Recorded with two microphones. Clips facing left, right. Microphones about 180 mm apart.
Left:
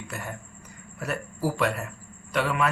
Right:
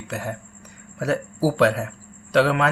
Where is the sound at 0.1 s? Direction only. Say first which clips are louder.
Right 7 dB; 85° right.